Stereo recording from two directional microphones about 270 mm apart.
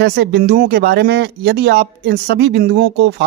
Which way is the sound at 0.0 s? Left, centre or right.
Right.